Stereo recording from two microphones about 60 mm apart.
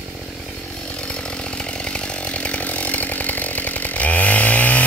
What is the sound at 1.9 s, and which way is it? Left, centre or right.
Chainsaw, centre.